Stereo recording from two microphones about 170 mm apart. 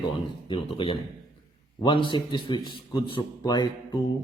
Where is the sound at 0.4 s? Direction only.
30° left (ahead or behind).